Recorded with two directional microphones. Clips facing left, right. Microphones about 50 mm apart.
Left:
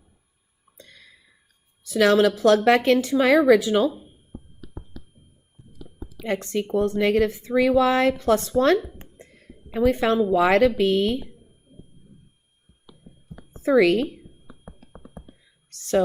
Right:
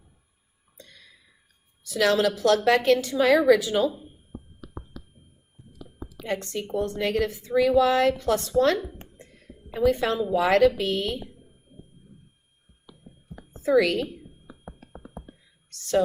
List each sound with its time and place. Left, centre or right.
1.8 s a woman's voice: left
6.2 s speech: left
13.6 s speech: left